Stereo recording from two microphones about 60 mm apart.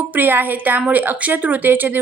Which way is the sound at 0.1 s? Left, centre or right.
Right.